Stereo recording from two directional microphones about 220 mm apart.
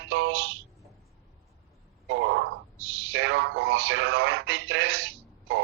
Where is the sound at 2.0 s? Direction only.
55° right (ahead or behind).